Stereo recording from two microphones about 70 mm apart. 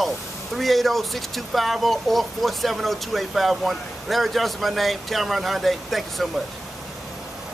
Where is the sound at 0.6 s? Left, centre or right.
Centre.